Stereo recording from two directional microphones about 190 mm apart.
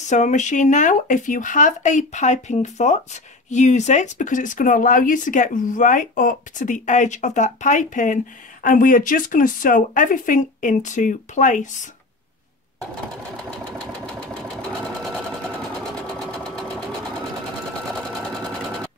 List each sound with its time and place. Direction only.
0.1 s speech: 40° left (ahead or behind)
15.0 s sewing machine: 5° left (ahead or behind)